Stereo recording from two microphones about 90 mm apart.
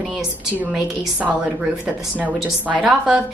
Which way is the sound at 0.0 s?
5° right (ahead or behind).